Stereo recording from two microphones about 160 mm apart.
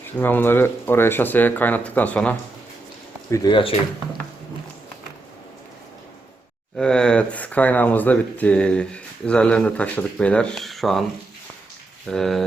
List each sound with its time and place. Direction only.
0.2 s speech: 10° left (ahead or behind)
3.3 s speech: 30° left (ahead or behind)
6.7 s speech: 5° left (ahead or behind)
12.0 s speech: 5° left (ahead or behind)